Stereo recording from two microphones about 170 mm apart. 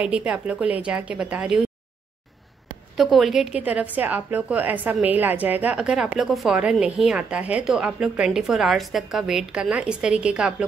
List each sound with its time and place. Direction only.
0.0 s a woman's voice: 5° right (ahead or behind)
3.0 s a woman's voice: centre (ahead or behind)